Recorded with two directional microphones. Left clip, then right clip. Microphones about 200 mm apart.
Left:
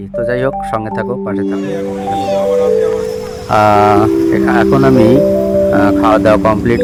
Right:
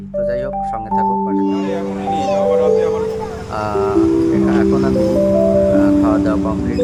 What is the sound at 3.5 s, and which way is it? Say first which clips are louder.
Speech: left 10 dB; 35° left (ahead or behind).